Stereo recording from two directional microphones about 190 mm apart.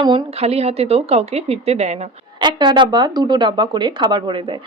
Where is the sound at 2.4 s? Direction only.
25° right (ahead or behind).